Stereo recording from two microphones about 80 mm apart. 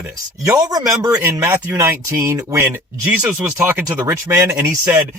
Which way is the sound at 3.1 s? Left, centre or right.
Centre.